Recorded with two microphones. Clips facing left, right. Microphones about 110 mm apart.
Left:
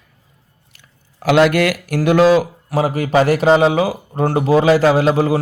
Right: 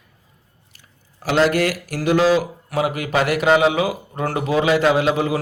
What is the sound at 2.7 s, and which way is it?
A man's voice, 30° left (ahead or behind).